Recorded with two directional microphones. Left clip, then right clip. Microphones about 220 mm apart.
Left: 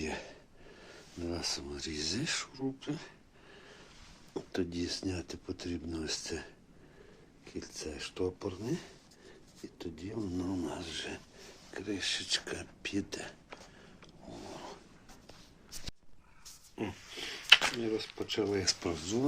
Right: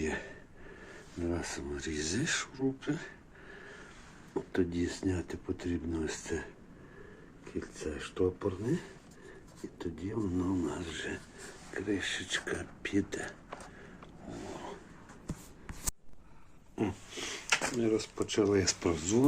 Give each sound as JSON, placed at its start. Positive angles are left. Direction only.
{"t": 0.0, "sound": "a sound", "side_deg": 15}
{"t": 1.2, "sound": "speech", "side_deg": 15}
{"t": 4.4, "sound": "speech", "side_deg": 10}
{"t": 7.6, "sound": "speech", "side_deg": 15}
{"t": 14.3, "sound": "zipper", "side_deg": 10}
{"t": 16.7, "sound": "a sound", "side_deg": -5}
{"t": 17.7, "sound": "speech", "side_deg": -5}